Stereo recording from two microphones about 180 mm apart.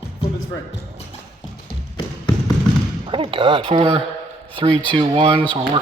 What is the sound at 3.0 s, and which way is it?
Speech, 30° right (ahead or behind).